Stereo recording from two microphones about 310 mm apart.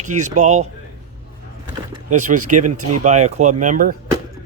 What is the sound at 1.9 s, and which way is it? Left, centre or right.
A man's voice, right.